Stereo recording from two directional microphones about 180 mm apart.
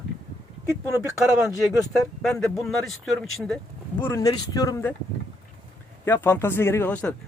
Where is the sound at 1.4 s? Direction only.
Centre (ahead or behind).